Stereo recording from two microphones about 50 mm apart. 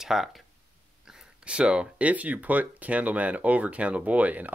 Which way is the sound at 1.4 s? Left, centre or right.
Right.